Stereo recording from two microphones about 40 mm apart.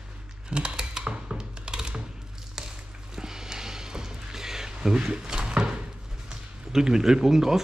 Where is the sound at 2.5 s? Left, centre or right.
Centre.